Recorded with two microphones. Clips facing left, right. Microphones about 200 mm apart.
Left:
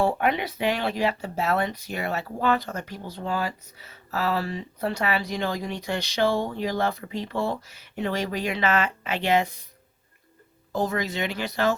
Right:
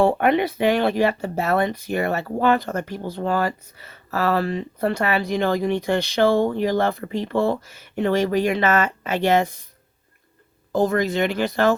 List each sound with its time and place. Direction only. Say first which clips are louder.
0.0 s speech: right 6 dB; 55° right (ahead or behind)
10.7 s speech: right 7 dB; 50° right (ahead or behind)